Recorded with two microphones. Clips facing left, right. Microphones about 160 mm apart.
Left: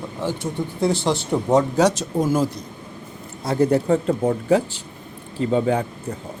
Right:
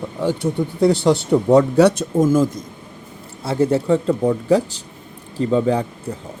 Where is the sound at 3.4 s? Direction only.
30° right (ahead or behind).